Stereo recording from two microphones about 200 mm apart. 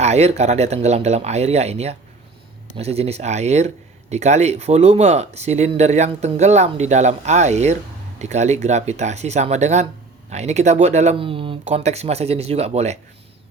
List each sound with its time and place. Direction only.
0.0 s speech: 35° right (ahead or behind)